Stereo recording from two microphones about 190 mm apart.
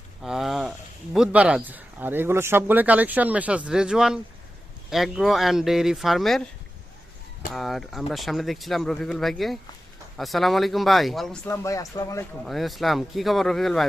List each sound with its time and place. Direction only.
0.2 s speech: centre (ahead or behind)
7.5 s speech: centre (ahead or behind)
11.4 s speech: 15° left (ahead or behind)
12.5 s speech: centre (ahead or behind)